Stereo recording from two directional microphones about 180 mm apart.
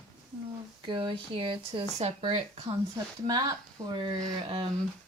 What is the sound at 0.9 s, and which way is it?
Speech, 25° right (ahead or behind).